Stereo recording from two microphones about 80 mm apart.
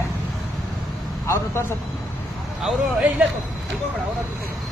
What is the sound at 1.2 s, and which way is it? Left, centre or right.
Speech, left.